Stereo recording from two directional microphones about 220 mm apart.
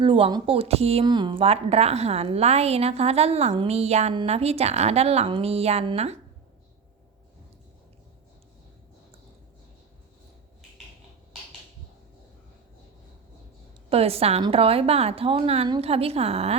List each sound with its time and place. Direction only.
0.0 s a woman's voice: 20° right (ahead or behind)
13.9 s a woman's voice: 25° right (ahead or behind)